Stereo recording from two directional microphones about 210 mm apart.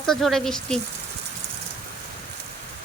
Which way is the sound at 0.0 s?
Centre (ahead or behind).